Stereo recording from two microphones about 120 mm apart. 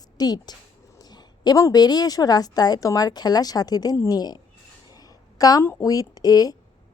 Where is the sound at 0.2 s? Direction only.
35° left (ahead or behind).